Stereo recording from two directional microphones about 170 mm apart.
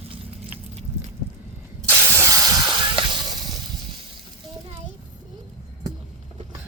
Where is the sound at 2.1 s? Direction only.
20° right (ahead or behind).